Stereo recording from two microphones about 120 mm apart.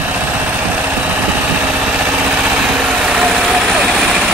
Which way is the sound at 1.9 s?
5° right (ahead or behind).